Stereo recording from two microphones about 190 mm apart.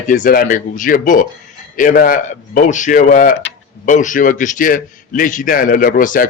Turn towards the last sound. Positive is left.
turn(degrees=45)  # may be behind; listen again after turning